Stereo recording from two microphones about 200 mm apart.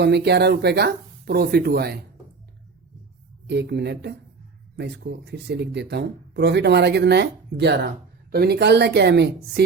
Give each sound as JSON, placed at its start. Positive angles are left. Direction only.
{"t": 0.0, "sound": "speech", "side_deg": -55}
{"t": 3.5, "sound": "speech", "side_deg": -55}